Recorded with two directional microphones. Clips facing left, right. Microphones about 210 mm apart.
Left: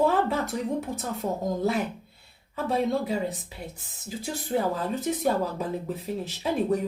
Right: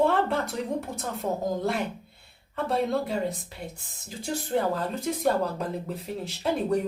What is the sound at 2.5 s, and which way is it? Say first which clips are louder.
Speech: even; centre (ahead or behind).